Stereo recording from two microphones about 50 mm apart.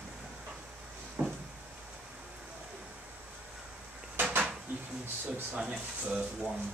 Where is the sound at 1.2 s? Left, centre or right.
Right.